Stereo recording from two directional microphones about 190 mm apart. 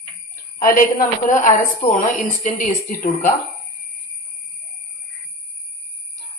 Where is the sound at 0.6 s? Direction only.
45° left (ahead or behind).